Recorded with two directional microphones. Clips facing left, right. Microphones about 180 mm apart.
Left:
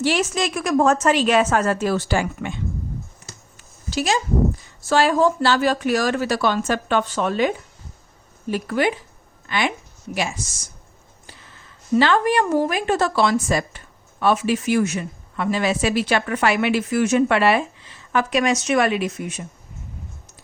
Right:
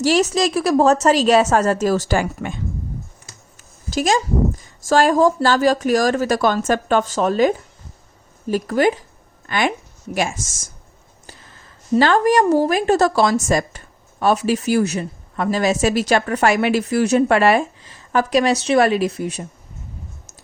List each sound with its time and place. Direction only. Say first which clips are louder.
0.0 s speech: right 5 dB; 40° right (ahead or behind)
3.6 s speech: right 3 dB; 45° right (ahead or behind)
11.9 s speech: right 3 dB; 40° right (ahead or behind)